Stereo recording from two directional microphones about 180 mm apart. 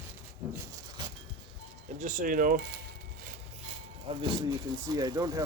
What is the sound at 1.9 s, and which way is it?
Speech, 45° right (ahead or behind).